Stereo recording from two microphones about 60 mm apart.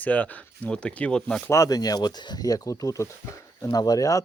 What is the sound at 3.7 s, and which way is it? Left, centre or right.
Speech, left.